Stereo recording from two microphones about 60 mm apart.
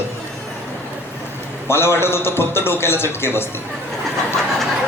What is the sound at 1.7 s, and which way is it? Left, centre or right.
Speech, left.